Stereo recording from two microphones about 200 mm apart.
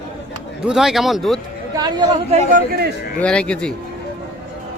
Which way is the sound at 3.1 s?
5° left (ahead or behind).